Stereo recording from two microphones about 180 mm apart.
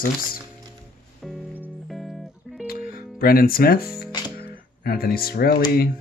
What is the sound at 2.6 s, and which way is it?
Music, 55° left (ahead or behind).